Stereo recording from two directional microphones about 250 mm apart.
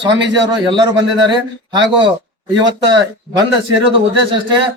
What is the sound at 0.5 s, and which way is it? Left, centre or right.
Speech, centre.